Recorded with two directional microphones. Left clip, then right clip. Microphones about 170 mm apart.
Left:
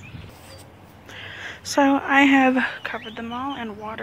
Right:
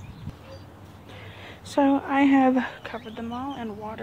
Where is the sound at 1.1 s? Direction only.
Centre (ahead or behind).